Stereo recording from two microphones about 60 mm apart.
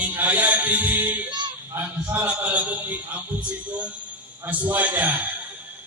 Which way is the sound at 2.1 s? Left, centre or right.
Right.